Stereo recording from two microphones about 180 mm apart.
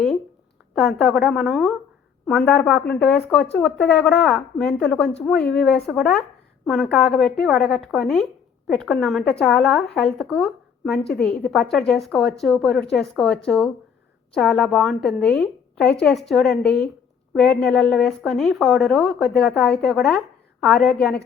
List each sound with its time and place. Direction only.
0.8 s a woman's voice: centre (ahead or behind)